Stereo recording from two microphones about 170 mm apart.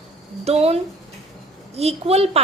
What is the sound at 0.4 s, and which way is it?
A woman's voice, 40° right (ahead or behind).